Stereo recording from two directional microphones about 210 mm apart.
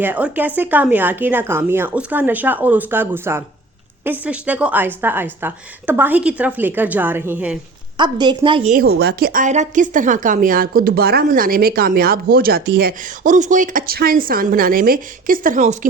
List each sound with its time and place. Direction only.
0.0 s a woman's voice: 10° right (ahead or behind)
7.9 s a woman's voice: 20° right (ahead or behind)
8.7 s a woman's voice: 45° right (ahead or behind)